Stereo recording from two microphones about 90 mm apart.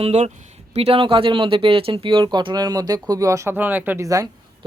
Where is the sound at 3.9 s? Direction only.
40° right (ahead or behind).